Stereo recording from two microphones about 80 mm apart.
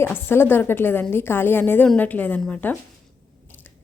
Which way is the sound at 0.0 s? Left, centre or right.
Left.